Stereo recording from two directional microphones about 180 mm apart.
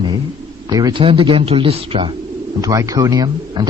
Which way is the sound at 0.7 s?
20° right (ahead or behind).